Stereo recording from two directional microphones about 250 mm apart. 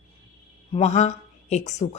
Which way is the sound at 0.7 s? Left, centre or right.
Left.